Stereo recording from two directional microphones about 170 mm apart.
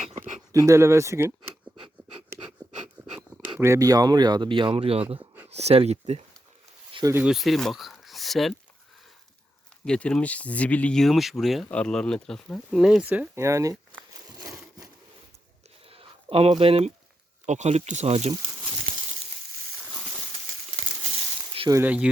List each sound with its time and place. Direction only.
0.5 s speech: 15° right (ahead or behind)
3.2 s speech: 10° right (ahead or behind); by 5.0 s 35° right (ahead or behind)
5.2 s a sound: 10° right (ahead or behind)
5.5 s speech: 40° right (ahead or behind)
7.1 s speech: 5° right (ahead or behind)
9.8 s speech: 5° left (ahead or behind); by 13.7 s 20° right (ahead or behind)
14.3 s a sound: 20° right (ahead or behind)
15.9 s a sound: 35° right (ahead or behind)
17.4 s speech: 45° right (ahead or behind)
21.7 s speech: 10° right (ahead or behind)